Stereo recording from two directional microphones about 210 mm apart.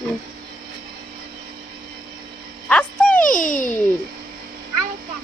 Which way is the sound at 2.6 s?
5° left (ahead or behind).